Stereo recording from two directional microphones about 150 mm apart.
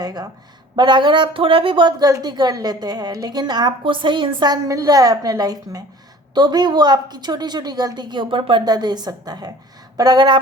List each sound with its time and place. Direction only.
0.0 s speech: 25° right (ahead or behind)